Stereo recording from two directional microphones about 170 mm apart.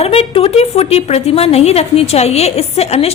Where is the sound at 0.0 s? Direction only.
35° left (ahead or behind).